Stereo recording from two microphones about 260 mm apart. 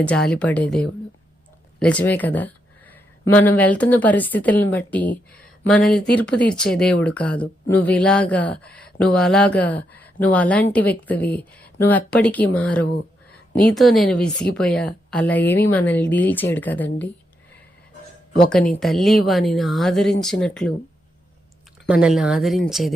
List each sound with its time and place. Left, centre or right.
0.0 s speech: centre
1.8 s speech: centre
18.7 s speech: centre
21.8 s speech: centre